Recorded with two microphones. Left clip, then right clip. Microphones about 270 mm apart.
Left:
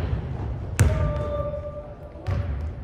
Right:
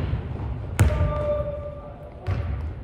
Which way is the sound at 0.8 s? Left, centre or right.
Centre.